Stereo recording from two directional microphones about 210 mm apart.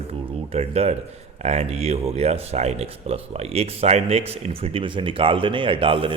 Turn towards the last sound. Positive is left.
turn(degrees=-25)  # may be behind; listen again after turning